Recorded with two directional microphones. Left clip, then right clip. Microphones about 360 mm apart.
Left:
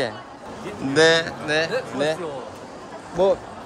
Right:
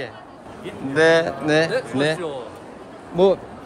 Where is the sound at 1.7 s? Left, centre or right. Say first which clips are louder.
Right 2 dB; right.